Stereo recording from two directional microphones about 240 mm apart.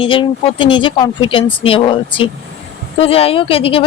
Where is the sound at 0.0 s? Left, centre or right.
Left.